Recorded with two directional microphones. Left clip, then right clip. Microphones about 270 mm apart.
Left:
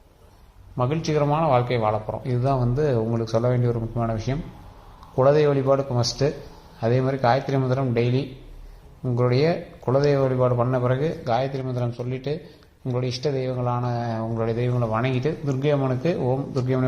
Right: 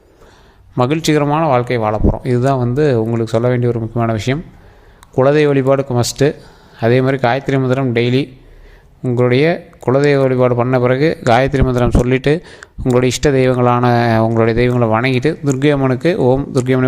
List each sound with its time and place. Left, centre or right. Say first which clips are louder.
0.8 s speech: right 9 dB; right